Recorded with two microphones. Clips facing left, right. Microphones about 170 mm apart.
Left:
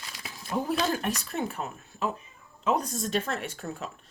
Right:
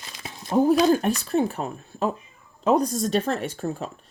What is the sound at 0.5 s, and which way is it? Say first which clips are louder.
Speech: right 10 dB; 40° right (ahead or behind).